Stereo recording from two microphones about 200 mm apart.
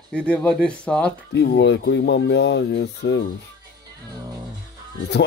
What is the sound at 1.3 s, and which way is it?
Speech, 55° left (ahead or behind).